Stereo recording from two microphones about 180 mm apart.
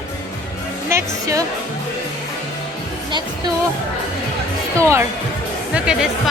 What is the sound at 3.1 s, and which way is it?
Speech, 25° right (ahead or behind).